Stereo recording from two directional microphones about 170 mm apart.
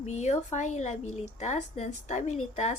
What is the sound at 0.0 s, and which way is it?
A woman's voice, 40° left (ahead or behind).